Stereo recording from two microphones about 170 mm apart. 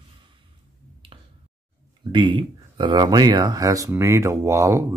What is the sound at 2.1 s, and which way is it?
Speech, 30° right (ahead or behind).